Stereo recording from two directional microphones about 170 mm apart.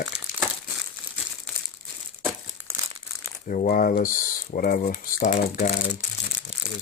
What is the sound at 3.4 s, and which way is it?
Speech, 55° left (ahead or behind).